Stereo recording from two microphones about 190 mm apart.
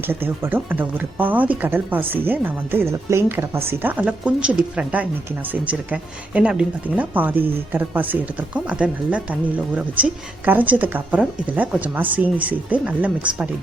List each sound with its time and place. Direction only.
0.1 s speech: 10° right (ahead or behind)